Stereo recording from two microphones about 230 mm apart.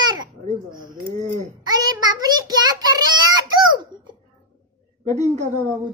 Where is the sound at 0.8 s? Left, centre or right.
Right.